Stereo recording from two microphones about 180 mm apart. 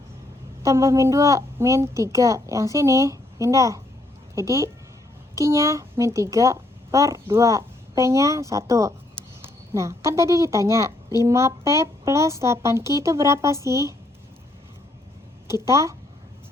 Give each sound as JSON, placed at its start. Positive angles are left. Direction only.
{"t": 0.6, "sound": "a woman's voice", "side_deg": -15}
{"t": 15.6, "sound": "a woman's voice", "side_deg": -15}